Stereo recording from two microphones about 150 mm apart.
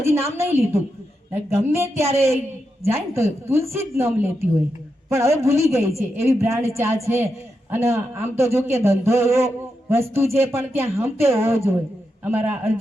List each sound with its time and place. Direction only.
0.0 s a man's voice: 20° right (ahead or behind)